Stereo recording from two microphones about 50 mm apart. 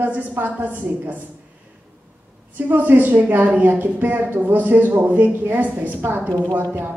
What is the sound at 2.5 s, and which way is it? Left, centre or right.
Speech, right.